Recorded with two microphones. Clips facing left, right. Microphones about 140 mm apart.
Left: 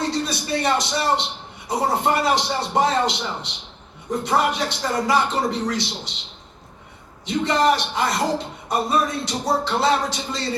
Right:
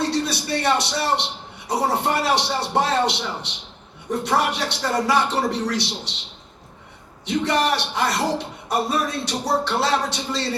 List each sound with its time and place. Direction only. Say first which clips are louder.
0.0 s a man's voice: right 1 dB; 75° right (ahead or behind)
7.3 s a man's voice: left 2 dB; 75° right (ahead or behind)